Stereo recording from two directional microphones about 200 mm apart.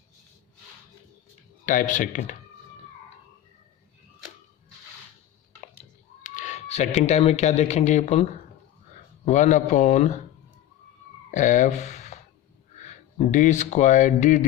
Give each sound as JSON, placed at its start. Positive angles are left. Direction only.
{"t": 1.6, "sound": "a man's voice", "side_deg": 40}
{"t": 6.2, "sound": "a man's voice", "side_deg": 40}
{"t": 11.3, "sound": "speech", "side_deg": 40}